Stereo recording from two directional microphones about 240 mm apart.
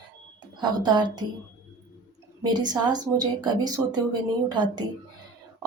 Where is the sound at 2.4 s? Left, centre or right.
Centre.